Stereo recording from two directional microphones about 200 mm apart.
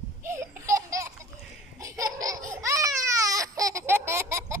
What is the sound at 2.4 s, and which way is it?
Baby cry, 15° right (ahead or behind).